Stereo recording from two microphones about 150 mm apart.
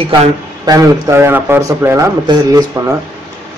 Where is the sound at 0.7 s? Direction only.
20° right (ahead or behind).